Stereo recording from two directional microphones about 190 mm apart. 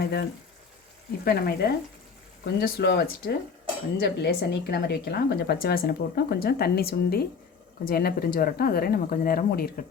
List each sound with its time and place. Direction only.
0.0 s a woman's voice: 60° left (ahead or behind)